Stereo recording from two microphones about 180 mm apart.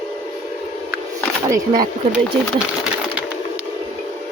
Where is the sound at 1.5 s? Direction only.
20° right (ahead or behind).